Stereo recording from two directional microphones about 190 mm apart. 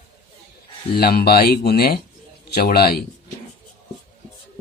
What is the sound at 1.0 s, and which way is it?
Speech, 55° left (ahead or behind).